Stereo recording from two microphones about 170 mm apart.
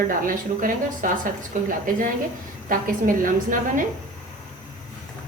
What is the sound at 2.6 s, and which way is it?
A woman's voice, 50° right (ahead or behind).